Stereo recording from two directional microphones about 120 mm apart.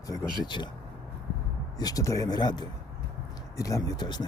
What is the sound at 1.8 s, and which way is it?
Speech, 30° left (ahead or behind).